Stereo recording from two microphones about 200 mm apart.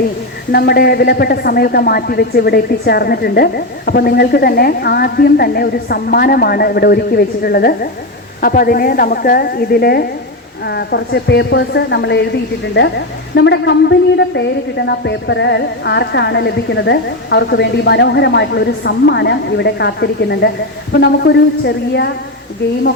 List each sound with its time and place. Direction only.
0.5 s speech: 50° left (ahead or behind)
13.3 s speech: 60° left (ahead or behind)